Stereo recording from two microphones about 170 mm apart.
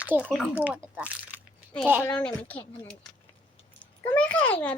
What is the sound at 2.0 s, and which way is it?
Speech, 5° left (ahead or behind).